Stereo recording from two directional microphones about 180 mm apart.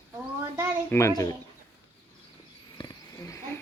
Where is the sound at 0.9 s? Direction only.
15° left (ahead or behind).